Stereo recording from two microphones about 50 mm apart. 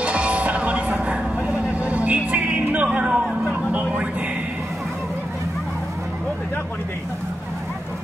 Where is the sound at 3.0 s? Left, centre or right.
Right.